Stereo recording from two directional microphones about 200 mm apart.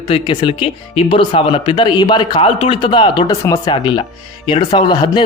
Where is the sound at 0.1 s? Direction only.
25° left (ahead or behind).